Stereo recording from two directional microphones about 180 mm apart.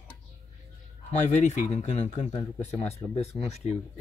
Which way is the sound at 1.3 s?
40° left (ahead or behind).